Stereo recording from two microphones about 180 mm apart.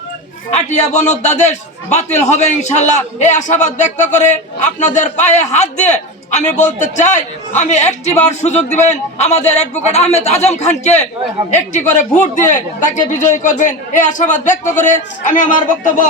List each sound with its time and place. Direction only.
0.7 s a man's voice: 40° left (ahead or behind)